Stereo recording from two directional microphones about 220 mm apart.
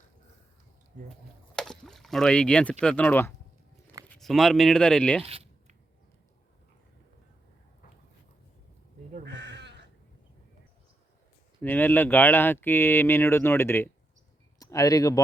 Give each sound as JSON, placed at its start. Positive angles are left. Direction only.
{"t": 1.5, "sound": "speech", "side_deg": 5}
{"t": 5.2, "sound": "a sound", "side_deg": -25}
{"t": 9.2, "sound": "sheep", "side_deg": -50}
{"t": 11.6, "sound": "speech", "side_deg": 10}